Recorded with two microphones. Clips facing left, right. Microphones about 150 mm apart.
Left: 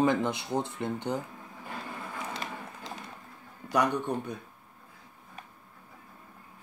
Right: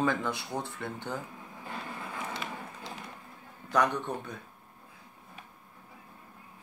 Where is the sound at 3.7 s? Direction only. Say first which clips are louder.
Left 1 dB; 15° left (ahead or behind).